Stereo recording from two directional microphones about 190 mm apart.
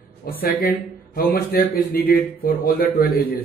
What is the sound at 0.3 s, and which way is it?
A man's voice, 50° left (ahead or behind).